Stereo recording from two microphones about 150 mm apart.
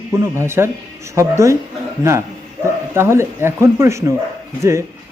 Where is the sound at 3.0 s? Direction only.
15° right (ahead or behind).